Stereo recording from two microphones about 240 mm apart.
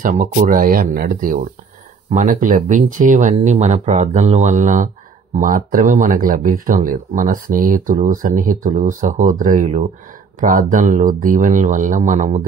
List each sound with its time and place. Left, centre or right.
0.0 s speech: right